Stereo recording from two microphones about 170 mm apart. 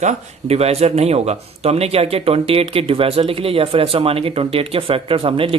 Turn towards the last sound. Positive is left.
turn(degrees=-30)  # may be behind; listen again after turning